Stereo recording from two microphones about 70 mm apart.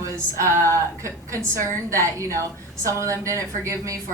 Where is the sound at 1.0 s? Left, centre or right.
Right.